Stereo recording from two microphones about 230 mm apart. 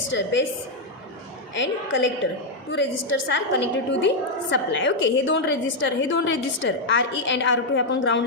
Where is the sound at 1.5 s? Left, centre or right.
Left.